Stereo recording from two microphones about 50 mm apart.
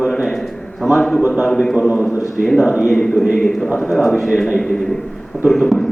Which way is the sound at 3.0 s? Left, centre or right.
Centre.